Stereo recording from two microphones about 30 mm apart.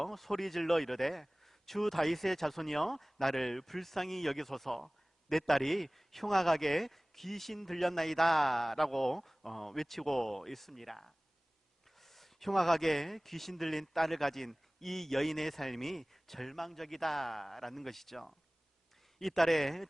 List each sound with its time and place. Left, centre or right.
0.0 s speech: centre